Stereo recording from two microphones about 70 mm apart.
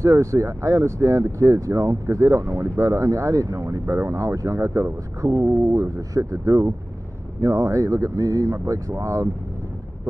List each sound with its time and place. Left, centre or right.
0.0 s speech: right
5.2 s speech: right